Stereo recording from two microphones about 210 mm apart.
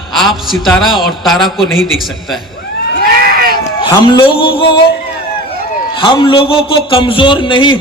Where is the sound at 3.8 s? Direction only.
25° left (ahead or behind).